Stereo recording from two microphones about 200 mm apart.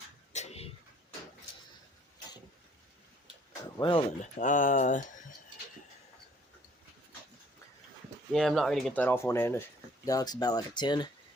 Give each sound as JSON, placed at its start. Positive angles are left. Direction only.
{"t": 0.3, "sound": "a sound", "side_deg": 30}
{"t": 3.8, "sound": "speech", "side_deg": 25}
{"t": 4.2, "sound": "speech", "side_deg": 40}
{"t": 8.3, "sound": "speech", "side_deg": 0}